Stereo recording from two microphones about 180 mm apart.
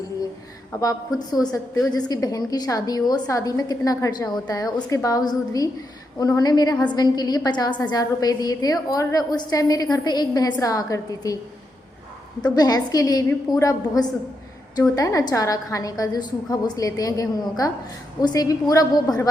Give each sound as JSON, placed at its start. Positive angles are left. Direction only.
{"t": 0.8, "sound": "a woman's voice", "side_deg": 20}
{"t": 12.5, "sound": "a woman's voice", "side_deg": 20}